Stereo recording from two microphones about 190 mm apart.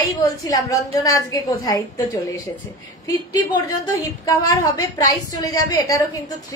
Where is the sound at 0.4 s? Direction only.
20° left (ahead or behind).